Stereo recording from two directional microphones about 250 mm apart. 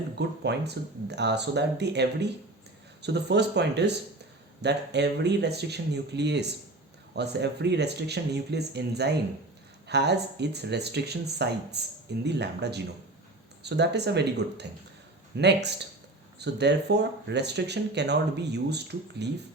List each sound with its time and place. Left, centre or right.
0.2 s speech: right